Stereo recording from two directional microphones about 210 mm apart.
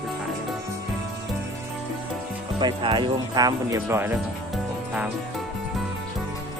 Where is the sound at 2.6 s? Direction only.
20° right (ahead or behind).